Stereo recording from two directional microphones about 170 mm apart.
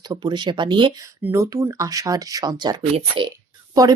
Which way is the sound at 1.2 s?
15° right (ahead or behind).